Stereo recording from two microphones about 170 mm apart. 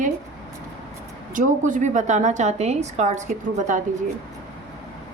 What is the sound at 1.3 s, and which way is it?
A woman's voice, 50° right (ahead or behind).